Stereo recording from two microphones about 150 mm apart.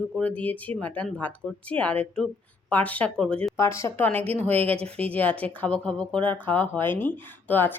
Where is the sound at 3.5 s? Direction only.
20° left (ahead or behind).